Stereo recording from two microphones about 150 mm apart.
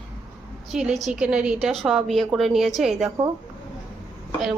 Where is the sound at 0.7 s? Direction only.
5° right (ahead or behind).